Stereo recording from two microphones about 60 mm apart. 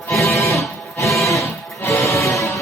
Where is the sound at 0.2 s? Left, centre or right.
Left.